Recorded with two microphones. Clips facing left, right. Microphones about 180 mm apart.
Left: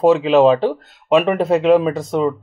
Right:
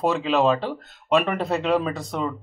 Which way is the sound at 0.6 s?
10° left (ahead or behind).